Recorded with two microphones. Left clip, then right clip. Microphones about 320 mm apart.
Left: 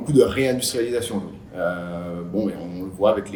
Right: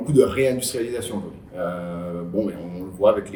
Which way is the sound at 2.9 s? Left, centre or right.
Centre.